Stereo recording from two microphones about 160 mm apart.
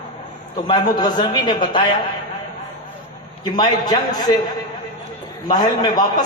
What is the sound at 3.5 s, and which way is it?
Speech, 25° left (ahead or behind).